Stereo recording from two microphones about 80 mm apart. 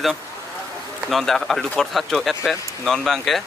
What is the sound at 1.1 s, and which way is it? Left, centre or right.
Speech, centre.